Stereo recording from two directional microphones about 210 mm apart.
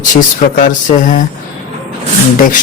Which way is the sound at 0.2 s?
35° left (ahead or behind).